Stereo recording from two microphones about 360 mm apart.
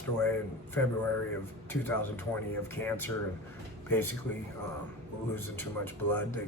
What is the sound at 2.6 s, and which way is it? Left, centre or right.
Speech, centre.